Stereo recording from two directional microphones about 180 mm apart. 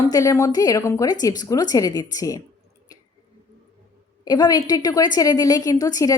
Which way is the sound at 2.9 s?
20° left (ahead or behind).